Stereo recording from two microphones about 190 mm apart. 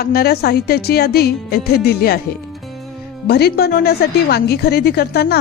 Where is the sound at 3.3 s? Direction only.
60° left (ahead or behind).